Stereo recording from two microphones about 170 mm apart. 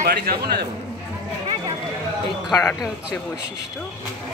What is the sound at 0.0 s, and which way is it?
Speech, 65° right (ahead or behind).